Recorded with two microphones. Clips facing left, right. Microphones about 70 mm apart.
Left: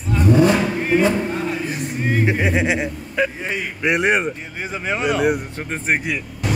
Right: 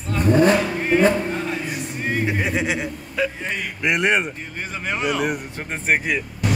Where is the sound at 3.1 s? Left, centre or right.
Centre.